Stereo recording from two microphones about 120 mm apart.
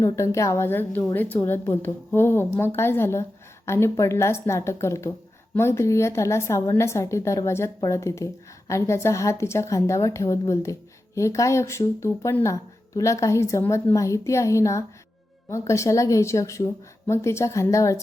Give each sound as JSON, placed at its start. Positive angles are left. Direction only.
{"t": 0.0, "sound": "a woman's voice", "side_deg": 25}